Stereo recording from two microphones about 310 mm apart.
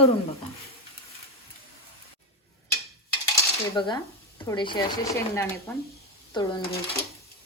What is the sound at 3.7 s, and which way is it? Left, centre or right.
Speech, centre.